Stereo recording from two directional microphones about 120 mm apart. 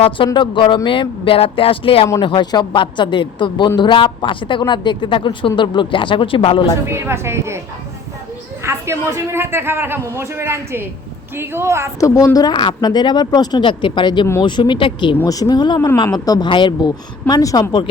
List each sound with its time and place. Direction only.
0.3 s a woman's voice: 40° left (ahead or behind)
6.8 s a man's voice: 20° right (ahead or behind)
8.6 s a man's voice: 20° right (ahead or behind)
11.9 s speech: 25° left (ahead or behind); by 15.1 s 45° left (ahead or behind)
15.2 s speech: 30° left (ahead or behind)